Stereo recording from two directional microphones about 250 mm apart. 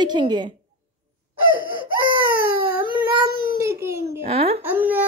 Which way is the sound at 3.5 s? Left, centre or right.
Centre.